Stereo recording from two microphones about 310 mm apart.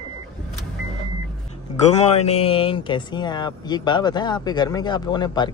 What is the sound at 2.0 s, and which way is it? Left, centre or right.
Speech, centre.